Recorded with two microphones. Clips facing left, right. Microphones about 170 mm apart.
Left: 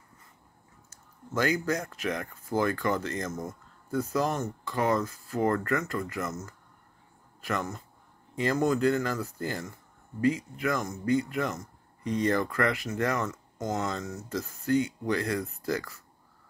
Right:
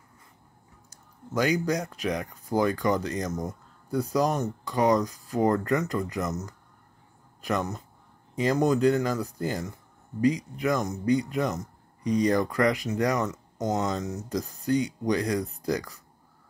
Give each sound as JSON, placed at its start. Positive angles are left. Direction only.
{"t": 0.8, "sound": "speech", "side_deg": -15}